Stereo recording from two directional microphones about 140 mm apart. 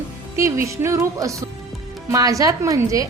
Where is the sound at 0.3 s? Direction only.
20° right (ahead or behind).